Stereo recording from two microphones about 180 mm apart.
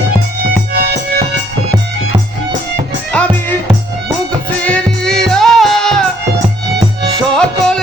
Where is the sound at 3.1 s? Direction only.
5° left (ahead or behind).